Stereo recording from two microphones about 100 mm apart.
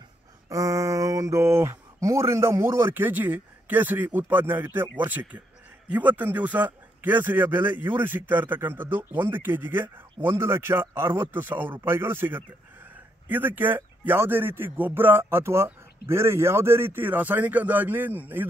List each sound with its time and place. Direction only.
0.5 s a man's voice: 30° right (ahead or behind)